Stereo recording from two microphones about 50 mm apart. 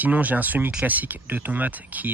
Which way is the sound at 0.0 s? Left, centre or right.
Right.